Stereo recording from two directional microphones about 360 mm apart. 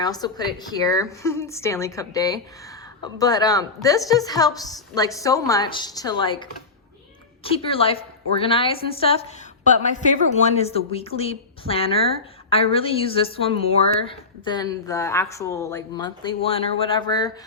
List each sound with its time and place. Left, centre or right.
0.0 s a woman's voice: centre
10.4 s a woman's voice: centre